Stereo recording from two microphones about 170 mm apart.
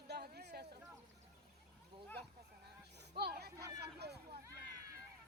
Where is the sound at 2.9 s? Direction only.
80° right.